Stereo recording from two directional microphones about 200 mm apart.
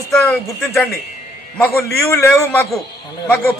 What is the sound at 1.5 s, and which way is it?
A man's voice, 10° left (ahead or behind).